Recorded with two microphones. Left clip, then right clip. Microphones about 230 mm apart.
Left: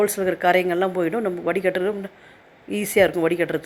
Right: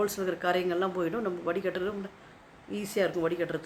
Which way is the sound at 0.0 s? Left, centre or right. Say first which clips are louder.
Left 10 dB; left.